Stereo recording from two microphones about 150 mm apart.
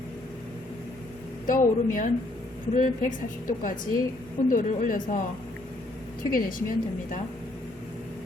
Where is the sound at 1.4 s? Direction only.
65° left (ahead or behind).